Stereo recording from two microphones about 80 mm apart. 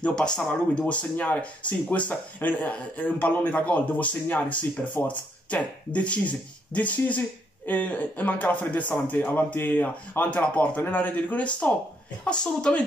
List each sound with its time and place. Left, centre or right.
0.0 s a woman's voice: centre